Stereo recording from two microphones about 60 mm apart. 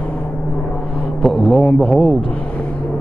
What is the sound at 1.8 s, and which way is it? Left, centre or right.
Speech, centre.